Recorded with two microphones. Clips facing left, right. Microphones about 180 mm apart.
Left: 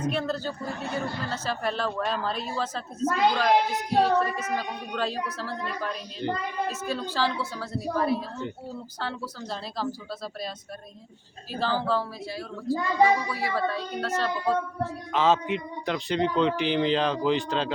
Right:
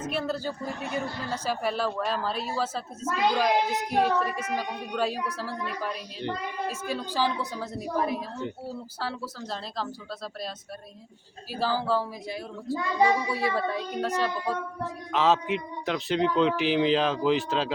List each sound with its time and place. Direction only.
0.0 s a woman's voice: 5° right (ahead or behind)
8.4 s a man's voice: 5° right (ahead or behind)
11.5 s a woman's voice: 10° right (ahead or behind)
15.1 s a man's voice: centre (ahead or behind)